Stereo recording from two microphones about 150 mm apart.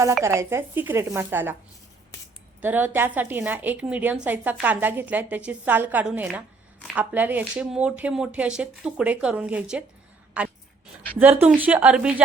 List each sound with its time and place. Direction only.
0.2 s speech: 20° right (ahead or behind)
2.6 s speech: 10° right (ahead or behind)